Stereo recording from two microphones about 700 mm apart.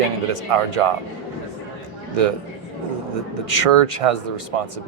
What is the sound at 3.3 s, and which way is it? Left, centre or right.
Speech, right.